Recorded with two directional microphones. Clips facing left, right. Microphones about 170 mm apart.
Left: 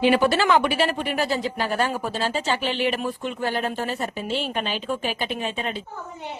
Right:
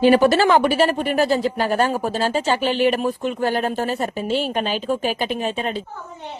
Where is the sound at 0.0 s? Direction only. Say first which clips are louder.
Right 5 dB; 40° right (ahead or behind).